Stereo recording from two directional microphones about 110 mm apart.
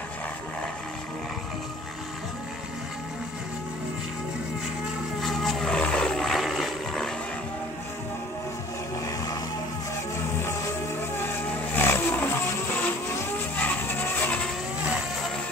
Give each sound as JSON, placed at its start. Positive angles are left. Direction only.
{"t": 5.2, "sound": "a sound", "side_deg": 0}
{"t": 9.0, "sound": "vehicle", "side_deg": 30}
{"t": 10.1, "sound": "music", "side_deg": 25}
{"t": 13.6, "sound": "music", "side_deg": 15}
{"t": 14.8, "sound": "vehicle", "side_deg": -10}